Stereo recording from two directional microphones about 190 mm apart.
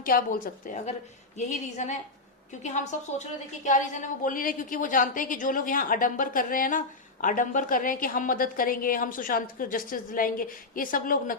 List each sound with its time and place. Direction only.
0.0 s a woman's voice: 50° left (ahead or behind)